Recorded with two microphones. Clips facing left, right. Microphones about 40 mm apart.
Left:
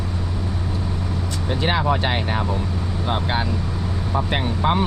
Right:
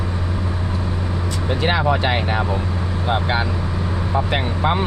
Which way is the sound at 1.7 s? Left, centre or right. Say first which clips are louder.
Right 2 dB; right.